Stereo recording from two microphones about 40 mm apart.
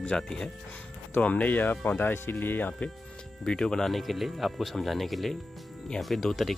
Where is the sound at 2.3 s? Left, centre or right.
Left.